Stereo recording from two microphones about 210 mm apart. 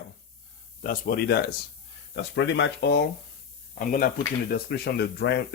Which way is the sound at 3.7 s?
40° left (ahead or behind).